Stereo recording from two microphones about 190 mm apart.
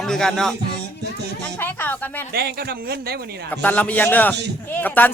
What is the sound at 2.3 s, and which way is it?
Speech, 55° right (ahead or behind).